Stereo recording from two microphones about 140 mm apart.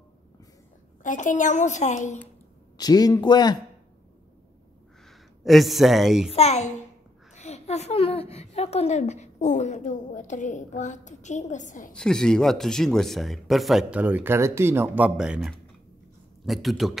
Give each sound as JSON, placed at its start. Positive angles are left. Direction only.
{"t": 1.0, "sound": "a woman's voice", "side_deg": 65}
{"t": 2.8, "sound": "a man's voice", "side_deg": 30}
{"t": 5.4, "sound": "speech", "side_deg": 0}
{"t": 6.3, "sound": "a child's voice", "side_deg": 50}
{"t": 11.9, "sound": "speech", "side_deg": 5}